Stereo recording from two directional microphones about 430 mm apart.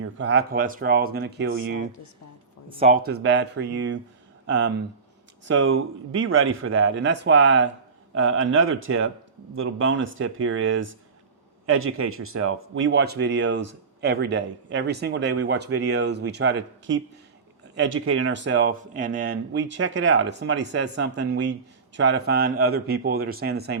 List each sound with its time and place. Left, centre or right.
0.0 s speech: right